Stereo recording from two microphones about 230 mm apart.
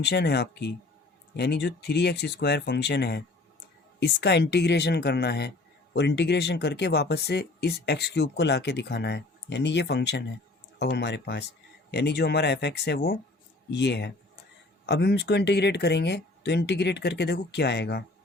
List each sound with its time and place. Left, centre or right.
0.0 s speech: left